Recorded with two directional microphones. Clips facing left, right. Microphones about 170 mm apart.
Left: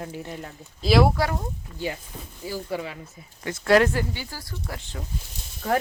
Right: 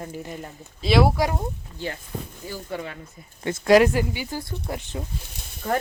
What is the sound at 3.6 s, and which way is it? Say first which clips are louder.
Speech: right 3 dB; 15° right (ahead or behind).